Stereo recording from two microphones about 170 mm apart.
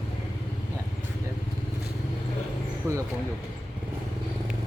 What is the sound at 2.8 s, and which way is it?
Speech, 15° right (ahead or behind).